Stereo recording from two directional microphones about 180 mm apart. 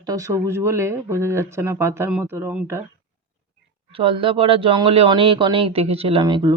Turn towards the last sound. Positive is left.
turn(degrees=-25)  # may be behind; listen again after turning